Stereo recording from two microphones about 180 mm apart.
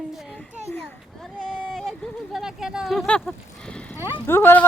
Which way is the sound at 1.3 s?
5° left (ahead or behind).